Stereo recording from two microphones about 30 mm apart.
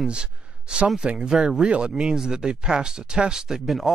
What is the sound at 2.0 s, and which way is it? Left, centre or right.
Speech, right.